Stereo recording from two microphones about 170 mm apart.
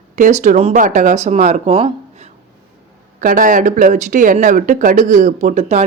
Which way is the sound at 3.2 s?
55° right (ahead or behind).